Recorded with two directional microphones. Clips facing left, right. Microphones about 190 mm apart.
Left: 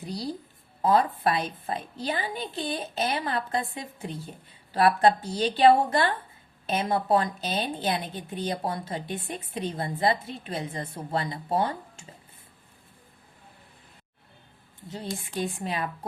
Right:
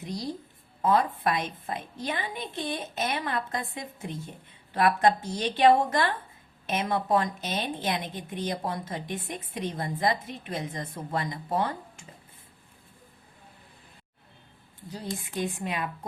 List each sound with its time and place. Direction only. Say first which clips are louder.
0.0 s a woman's voice: left 1 dB; 30° left (ahead or behind)
14.8 s a woman's voice: left 1 dB; 25° left (ahead or behind)